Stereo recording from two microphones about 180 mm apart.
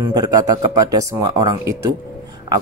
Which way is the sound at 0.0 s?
20° right (ahead or behind).